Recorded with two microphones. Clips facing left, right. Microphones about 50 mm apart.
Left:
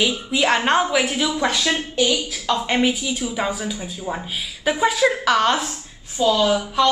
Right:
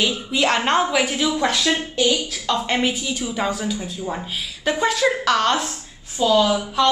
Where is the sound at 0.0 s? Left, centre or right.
Centre.